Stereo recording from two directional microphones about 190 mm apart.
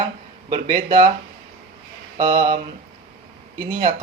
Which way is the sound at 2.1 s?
20° right (ahead or behind).